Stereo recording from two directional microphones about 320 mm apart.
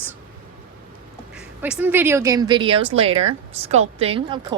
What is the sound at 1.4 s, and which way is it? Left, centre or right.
A woman's voice, centre.